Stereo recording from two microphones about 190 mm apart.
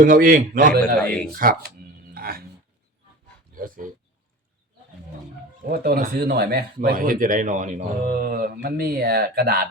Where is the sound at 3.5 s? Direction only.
45° right (ahead or behind).